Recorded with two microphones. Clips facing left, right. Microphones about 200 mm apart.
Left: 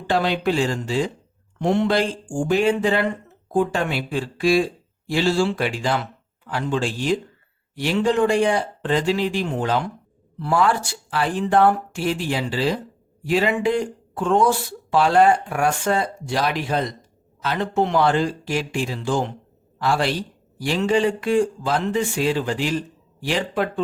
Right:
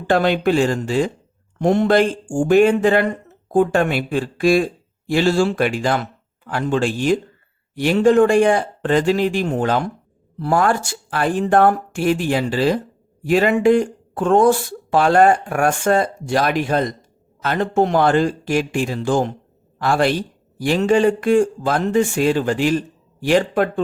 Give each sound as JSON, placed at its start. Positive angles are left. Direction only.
{"t": 0.1, "sound": "speech", "side_deg": -50}